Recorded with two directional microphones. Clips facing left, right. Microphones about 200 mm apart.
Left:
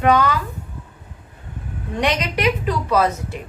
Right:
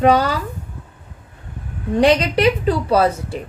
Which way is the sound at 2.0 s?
30° right (ahead or behind).